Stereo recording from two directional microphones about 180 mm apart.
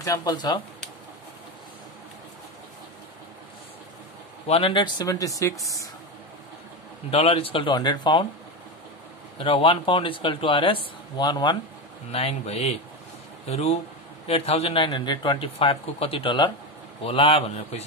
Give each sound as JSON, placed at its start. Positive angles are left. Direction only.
{"t": 0.0, "sound": "speech", "side_deg": 20}
{"t": 4.5, "sound": "speech", "side_deg": 30}
{"t": 7.1, "sound": "speech", "side_deg": 35}
{"t": 9.4, "sound": "speech", "side_deg": 30}
{"t": 12.1, "sound": "a man's voice", "side_deg": 35}